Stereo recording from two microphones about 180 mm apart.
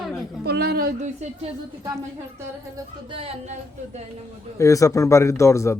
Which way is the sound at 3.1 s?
30° right (ahead or behind).